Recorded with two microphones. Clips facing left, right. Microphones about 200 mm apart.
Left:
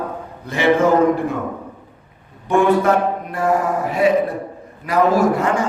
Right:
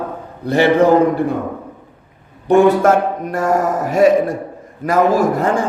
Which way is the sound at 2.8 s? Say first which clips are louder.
Right 3 dB; 45° right (ahead or behind).